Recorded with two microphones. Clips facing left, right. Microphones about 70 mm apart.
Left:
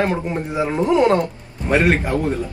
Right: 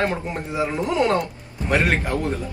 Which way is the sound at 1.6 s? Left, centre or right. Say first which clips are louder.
Left 4 dB; centre.